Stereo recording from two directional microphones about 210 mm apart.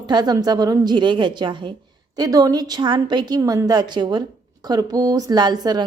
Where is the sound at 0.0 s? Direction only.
20° right (ahead or behind).